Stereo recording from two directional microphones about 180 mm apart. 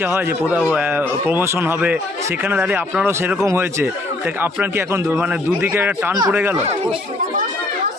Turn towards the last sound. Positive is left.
turn(degrees=-10)  # may be behind; listen again after turning